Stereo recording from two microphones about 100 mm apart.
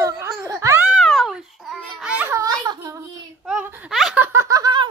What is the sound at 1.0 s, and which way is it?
Babbling, centre (ahead or behind).